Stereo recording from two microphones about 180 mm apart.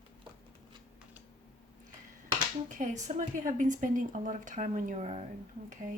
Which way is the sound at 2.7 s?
45° right (ahead or behind).